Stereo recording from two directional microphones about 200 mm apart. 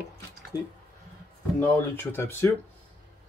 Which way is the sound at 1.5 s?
10° left (ahead or behind).